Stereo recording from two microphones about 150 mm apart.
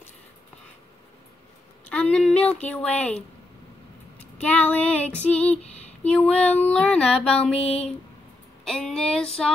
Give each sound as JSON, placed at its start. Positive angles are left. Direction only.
{"t": 1.9, "sound": "a woman's voice", "side_deg": 5}
{"t": 4.5, "sound": "female singing", "side_deg": 10}